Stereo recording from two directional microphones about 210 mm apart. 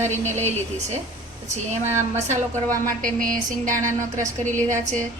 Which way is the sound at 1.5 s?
35° right (ahead or behind).